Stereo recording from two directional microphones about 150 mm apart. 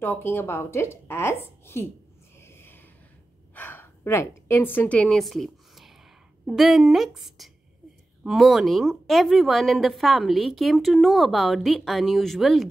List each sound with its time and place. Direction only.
0.0 s speech: 15° left (ahead or behind)
2.4 s a sound: 15° left (ahead or behind); by 5.9 s centre (ahead or behind)
6.4 s a woman's voice: centre (ahead or behind)